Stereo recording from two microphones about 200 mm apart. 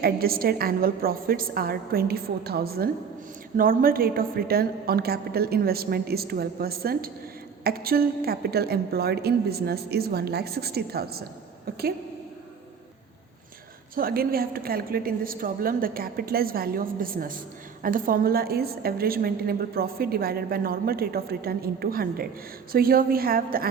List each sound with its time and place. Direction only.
0.0 s a woman's voice: 50° right (ahead or behind)
13.9 s a woman's voice: 45° right (ahead or behind)